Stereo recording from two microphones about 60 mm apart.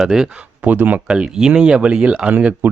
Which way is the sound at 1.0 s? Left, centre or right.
Centre.